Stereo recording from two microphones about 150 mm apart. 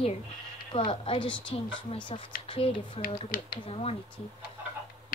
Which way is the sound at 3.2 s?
75° left (ahead or behind).